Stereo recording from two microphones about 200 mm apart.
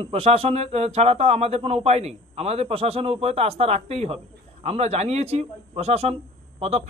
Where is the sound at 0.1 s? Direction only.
30° right (ahead or behind).